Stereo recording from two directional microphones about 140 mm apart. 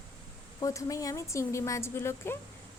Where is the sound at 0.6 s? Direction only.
25° left (ahead or behind).